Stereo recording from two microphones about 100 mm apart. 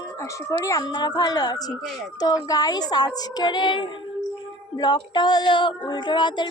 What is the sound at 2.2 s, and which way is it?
Child singing, 40° left (ahead or behind).